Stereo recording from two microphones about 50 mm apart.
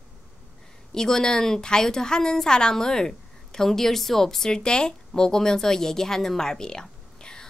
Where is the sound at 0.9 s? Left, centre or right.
Centre.